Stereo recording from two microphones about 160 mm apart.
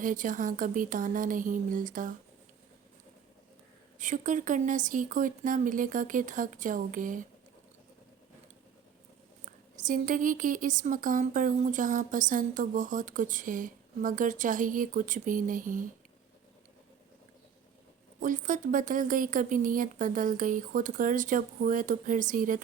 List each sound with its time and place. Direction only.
0.0 s speech: 55° right (ahead or behind)
3.9 s speech: 50° right (ahead or behind)
9.7 s speech: 55° right (ahead or behind)
18.2 s speech: 55° right (ahead or behind)